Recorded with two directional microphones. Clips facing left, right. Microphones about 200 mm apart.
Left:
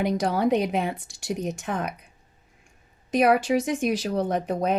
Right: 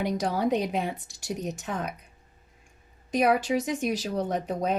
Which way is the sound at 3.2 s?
70° left (ahead or behind).